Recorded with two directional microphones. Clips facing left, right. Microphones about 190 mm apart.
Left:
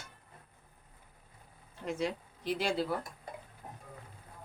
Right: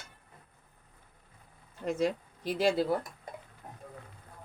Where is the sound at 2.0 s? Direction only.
45° right (ahead or behind).